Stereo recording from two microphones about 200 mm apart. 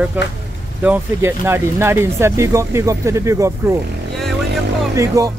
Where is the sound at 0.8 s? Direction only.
10° right (ahead or behind).